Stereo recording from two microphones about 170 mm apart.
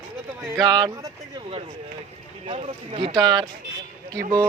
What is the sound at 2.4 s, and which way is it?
Speech, 35° right (ahead or behind).